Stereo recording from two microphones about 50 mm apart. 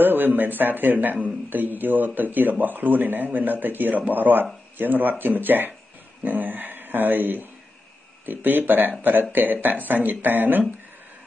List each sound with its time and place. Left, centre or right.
0.0 s speech: right